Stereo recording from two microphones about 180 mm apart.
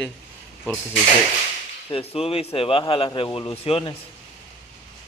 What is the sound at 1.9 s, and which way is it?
A man's voice, 35° left (ahead or behind).